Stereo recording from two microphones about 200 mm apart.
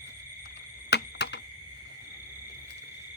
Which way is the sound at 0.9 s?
60° left (ahead or behind).